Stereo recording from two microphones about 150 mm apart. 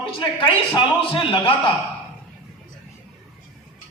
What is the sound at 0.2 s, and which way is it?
A man's voice, 35° left (ahead or behind).